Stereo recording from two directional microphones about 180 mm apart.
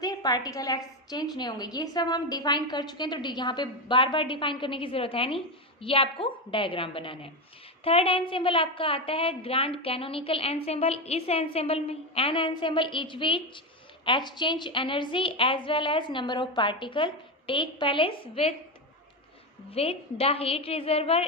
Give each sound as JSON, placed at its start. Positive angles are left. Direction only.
{"t": 0.0, "sound": "a woman's voice", "side_deg": 20}
{"t": 19.7, "sound": "a woman's voice", "side_deg": 30}